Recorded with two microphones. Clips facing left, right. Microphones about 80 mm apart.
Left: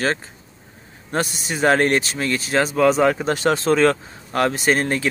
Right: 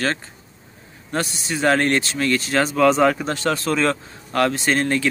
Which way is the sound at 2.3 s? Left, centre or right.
Centre.